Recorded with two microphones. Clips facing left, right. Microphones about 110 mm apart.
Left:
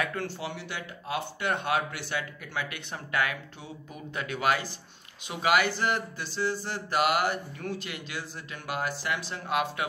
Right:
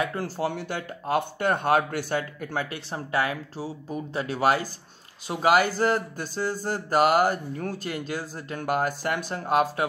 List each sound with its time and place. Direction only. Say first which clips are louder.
0.0 s speech: right 3 dB; 30° right (ahead or behind)
0.4 s speech: right 8 dB; 45° right (ahead or behind)